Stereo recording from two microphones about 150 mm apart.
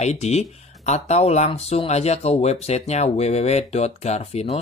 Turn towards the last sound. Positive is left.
turn(degrees=45)  # may be behind; listen again after turning